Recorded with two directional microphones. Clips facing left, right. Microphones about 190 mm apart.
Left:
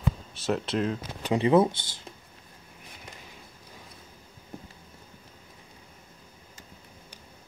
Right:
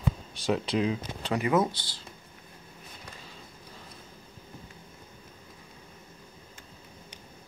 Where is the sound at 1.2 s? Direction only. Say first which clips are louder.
Left 5 dB; 25° left (ahead or behind).